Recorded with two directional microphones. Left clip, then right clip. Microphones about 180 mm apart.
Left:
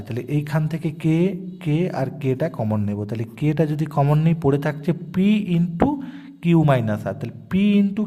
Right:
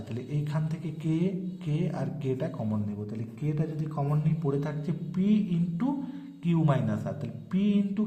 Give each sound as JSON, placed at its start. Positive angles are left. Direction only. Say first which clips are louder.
{"t": 0.1, "sound": "speech", "louder": "left 11 dB", "side_deg": 35}
{"t": 2.7, "sound": "speech", "louder": "left 9 dB", "side_deg": 45}